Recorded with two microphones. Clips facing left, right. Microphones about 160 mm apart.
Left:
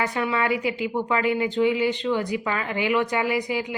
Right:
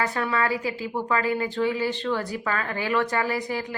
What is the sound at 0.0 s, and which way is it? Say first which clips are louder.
A woman's voice: left 1 dB; 15° left (ahead or behind).